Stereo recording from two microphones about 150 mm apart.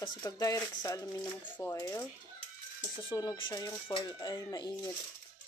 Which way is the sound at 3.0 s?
30° left (ahead or behind).